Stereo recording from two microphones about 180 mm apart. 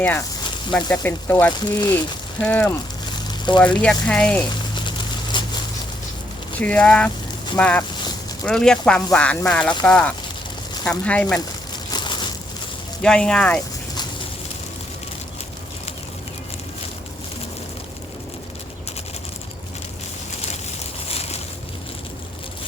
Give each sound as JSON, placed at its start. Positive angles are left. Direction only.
{"t": 0.0, "sound": "speech", "side_deg": 10}
{"t": 0.4, "sound": "snake", "side_deg": 25}
{"t": 1.0, "sound": "speech", "side_deg": 10}
{"t": 1.5, "sound": "speech", "side_deg": 25}
{"t": 2.4, "sound": "speech", "side_deg": 10}
{"t": 3.1, "sound": "a sound", "side_deg": 25}
{"t": 3.8, "sound": "speech", "side_deg": 5}
{"t": 4.7, "sound": "a sound", "side_deg": 25}
{"t": 6.6, "sound": "speech", "side_deg": 5}
{"t": 11.9, "sound": "crushing", "side_deg": 25}
{"t": 13.0, "sound": "speech", "side_deg": 5}
{"t": 21.1, "sound": "boat", "side_deg": 35}